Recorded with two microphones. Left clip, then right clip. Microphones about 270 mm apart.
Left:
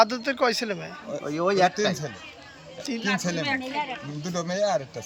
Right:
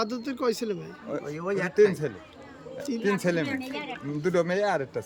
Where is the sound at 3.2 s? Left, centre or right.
Centre.